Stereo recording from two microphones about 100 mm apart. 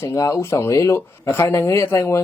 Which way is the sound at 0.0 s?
30° left (ahead or behind).